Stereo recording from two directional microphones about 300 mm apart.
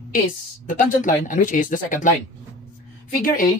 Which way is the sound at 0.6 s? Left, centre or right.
Left.